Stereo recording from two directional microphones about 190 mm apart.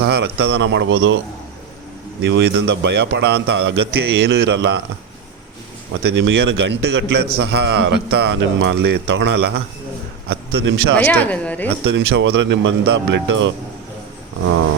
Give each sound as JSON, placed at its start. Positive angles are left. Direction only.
{"t": 0.0, "sound": "a man's voice", "side_deg": -60}
{"t": 2.2, "sound": "a man's voice", "side_deg": -65}
{"t": 6.0, "sound": "a man's voice", "side_deg": -65}
{"t": 10.9, "sound": "speech", "side_deg": 10}
{"t": 11.9, "sound": "a man's voice", "side_deg": -65}